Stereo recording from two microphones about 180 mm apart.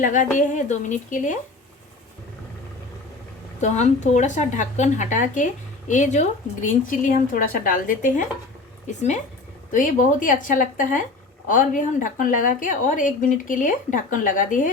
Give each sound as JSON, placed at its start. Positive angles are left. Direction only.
{"t": 0.0, "sound": "a woman's voice", "side_deg": 45}
{"t": 3.6, "sound": "a woman's voice", "side_deg": 40}
{"t": 9.7, "sound": "a woman's voice", "side_deg": 45}